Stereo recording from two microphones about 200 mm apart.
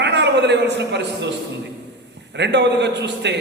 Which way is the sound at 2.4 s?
60° right (ahead or behind).